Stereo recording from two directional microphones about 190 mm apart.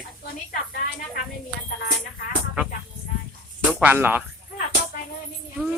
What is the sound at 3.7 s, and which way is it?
Speech, 5° right (ahead or behind).